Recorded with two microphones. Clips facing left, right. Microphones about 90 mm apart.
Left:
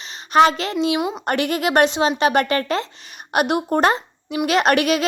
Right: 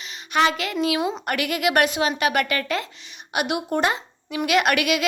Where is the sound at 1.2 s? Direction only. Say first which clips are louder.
Left 3 dB; 35° left (ahead or behind).